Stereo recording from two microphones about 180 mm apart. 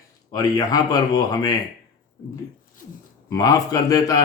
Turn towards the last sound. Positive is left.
turn(degrees=20)  # may be behind; listen again after turning